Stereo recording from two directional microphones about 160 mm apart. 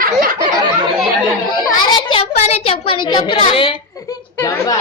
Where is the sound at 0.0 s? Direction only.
65° right (ahead or behind).